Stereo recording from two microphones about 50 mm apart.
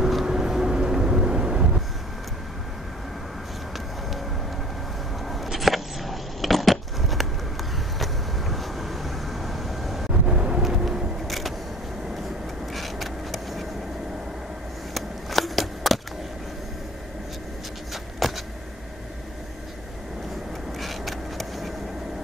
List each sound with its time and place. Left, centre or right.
0.0 s vehicle: centre
5.3 s a sound: centre
8.0 s vehicle: centre
10.1 s vehicle: right
11.2 s vehicle: centre
12.7 s vehicle: centre
15.0 s a sound: centre
18.2 s vehicle: centre
20.8 s a sound: centre